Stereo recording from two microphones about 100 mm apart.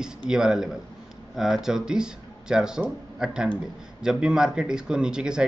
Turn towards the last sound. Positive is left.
turn(degrees=-10)  # may be behind; listen again after turning